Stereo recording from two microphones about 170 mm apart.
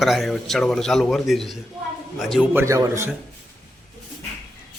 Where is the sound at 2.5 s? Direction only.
15° right (ahead or behind).